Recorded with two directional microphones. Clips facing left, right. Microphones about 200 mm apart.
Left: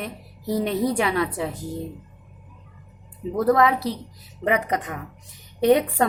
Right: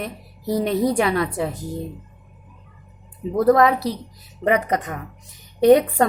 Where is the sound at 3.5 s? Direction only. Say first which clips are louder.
Right 3 dB; 40° right (ahead or behind).